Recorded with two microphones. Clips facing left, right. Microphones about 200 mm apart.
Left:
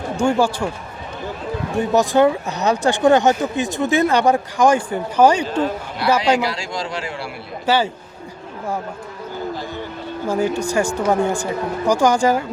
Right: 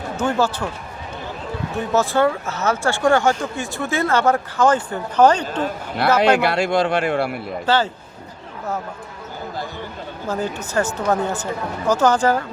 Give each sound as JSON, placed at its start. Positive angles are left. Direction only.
{"t": 0.2, "sound": "speech", "side_deg": 10}
{"t": 1.7, "sound": "speech", "side_deg": 15}
{"t": 6.2, "sound": "a man's voice", "side_deg": -60}
{"t": 10.2, "sound": "speech", "side_deg": 10}